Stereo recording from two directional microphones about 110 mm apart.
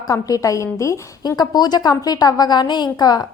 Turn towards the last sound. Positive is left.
turn(degrees=35)  # may be behind; listen again after turning